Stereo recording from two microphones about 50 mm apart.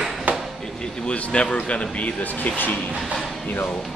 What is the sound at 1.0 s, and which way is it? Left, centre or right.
Speech, left.